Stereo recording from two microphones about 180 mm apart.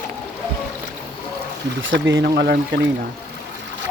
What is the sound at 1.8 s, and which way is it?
Speech, 90° right.